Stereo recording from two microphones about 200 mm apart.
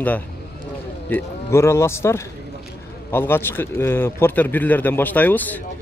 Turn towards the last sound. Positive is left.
turn(degrees=10)  # may be behind; listen again after turning